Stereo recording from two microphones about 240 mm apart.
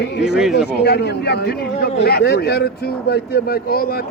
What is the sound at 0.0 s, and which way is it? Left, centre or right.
A man's voice, left.